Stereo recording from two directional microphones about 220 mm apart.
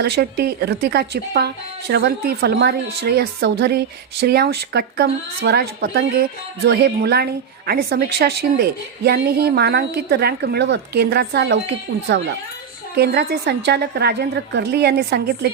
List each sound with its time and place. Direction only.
0.0 s a woman's voice: 50° right (ahead or behind)